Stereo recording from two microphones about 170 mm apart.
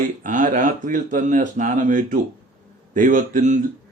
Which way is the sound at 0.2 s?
50° right (ahead or behind).